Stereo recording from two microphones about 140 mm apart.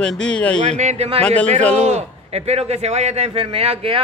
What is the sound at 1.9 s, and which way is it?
A man's voice, 50° right (ahead or behind).